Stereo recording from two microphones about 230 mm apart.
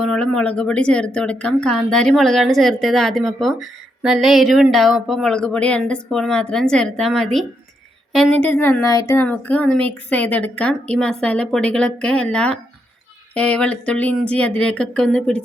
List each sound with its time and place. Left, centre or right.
0.0 s speech: centre